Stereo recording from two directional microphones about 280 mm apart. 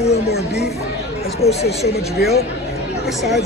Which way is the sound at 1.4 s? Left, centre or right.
Left.